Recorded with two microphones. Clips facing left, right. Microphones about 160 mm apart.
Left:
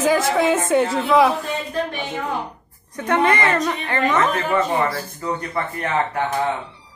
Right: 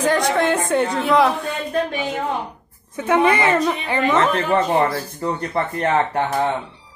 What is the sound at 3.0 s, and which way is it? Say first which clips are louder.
A woman's voice: right 2 dB; 10° right (ahead or behind).